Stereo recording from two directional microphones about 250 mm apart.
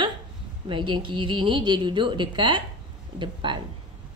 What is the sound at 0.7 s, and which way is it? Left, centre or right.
A woman's voice, centre.